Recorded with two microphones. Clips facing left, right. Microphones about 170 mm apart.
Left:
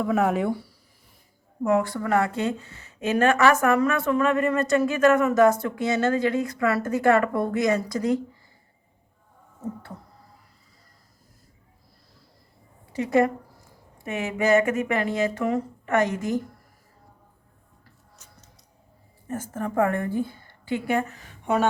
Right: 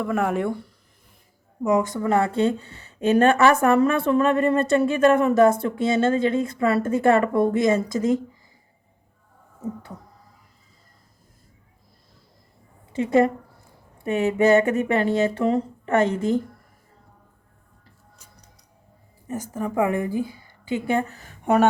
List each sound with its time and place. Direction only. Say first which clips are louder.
0.0 s speech: left 1 dB; centre (ahead or behind)
1.6 s a woman's voice: right 2 dB; 15° right (ahead or behind)
12.9 s a woman's voice: right 2 dB; 25° right (ahead or behind)
19.3 s a woman's voice: right 2 dB; 15° right (ahead or behind)
21.1 s speech: right 1 dB; 40° right (ahead or behind)
21.4 s speech: right 5 dB; 55° right (ahead or behind)